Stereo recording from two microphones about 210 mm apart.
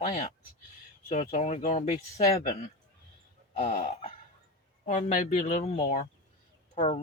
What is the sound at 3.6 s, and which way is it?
Speech, 30° left (ahead or behind).